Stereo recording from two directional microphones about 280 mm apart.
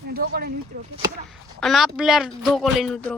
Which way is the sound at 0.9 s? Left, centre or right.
Centre.